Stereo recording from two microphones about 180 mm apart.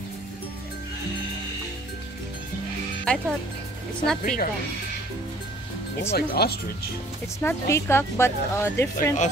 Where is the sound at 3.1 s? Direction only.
5° left (ahead or behind).